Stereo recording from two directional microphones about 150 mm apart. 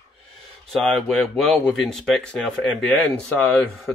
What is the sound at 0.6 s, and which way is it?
Speech, centre (ahead or behind).